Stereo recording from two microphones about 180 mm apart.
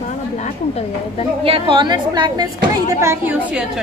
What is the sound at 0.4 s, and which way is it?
Speech, 35° left (ahead or behind).